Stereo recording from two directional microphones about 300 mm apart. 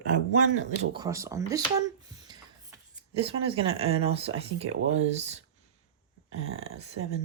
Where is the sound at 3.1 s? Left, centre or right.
Centre.